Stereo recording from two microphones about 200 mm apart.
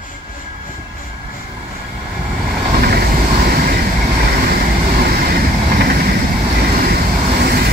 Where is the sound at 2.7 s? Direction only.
50° right (ahead or behind).